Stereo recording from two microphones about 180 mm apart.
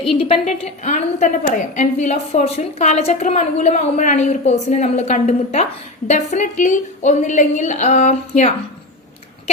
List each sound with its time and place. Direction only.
0.4 s a woman's voice: 40° left (ahead or behind)